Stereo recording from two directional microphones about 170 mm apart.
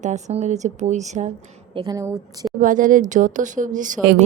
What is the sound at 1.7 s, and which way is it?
Speech, 20° right (ahead or behind).